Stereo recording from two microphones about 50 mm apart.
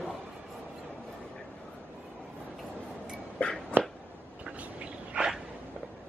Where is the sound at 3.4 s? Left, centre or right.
Left.